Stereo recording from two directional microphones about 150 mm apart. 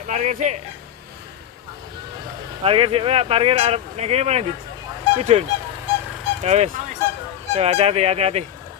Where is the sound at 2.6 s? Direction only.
40° right (ahead or behind).